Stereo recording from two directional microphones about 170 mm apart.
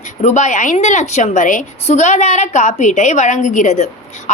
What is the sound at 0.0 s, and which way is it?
A woman's voice, 45° left (ahead or behind).